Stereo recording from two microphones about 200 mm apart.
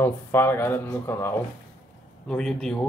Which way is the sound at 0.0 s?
10° left (ahead or behind).